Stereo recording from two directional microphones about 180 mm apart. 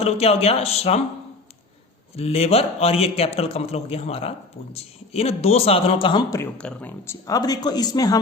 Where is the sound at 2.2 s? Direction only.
35° left (ahead or behind).